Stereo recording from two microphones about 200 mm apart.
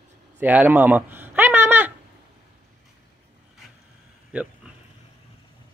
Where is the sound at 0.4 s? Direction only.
10° right (ahead or behind).